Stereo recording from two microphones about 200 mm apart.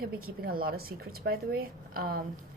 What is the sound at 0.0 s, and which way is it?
A woman's voice, 50° right (ahead or behind).